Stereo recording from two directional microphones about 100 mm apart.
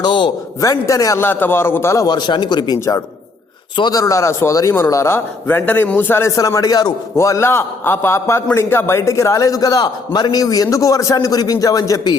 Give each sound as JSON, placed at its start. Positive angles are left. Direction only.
{"t": 0.0, "sound": "speech", "side_deg": 50}
{"t": 0.6, "sound": "a man's voice", "side_deg": 35}
{"t": 1.2, "sound": "a man's voice", "side_deg": 20}
{"t": 2.0, "sound": "speech", "side_deg": 45}
{"t": 3.8, "sound": "speech", "side_deg": 45}
{"t": 4.0, "sound": "a man's voice", "side_deg": 30}
{"t": 6.3, "sound": "a man's voice", "side_deg": 35}
{"t": 7.2, "sound": "a man's voice", "side_deg": 30}